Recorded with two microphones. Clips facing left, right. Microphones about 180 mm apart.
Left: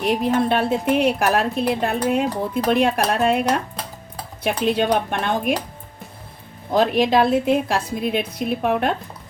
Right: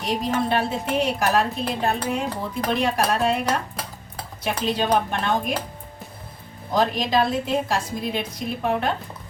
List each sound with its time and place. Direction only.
0.0 s a woman's voice: 60° left (ahead or behind)
4.4 s a woman's voice: 55° left (ahead or behind)
6.7 s a woman's voice: 60° left (ahead or behind)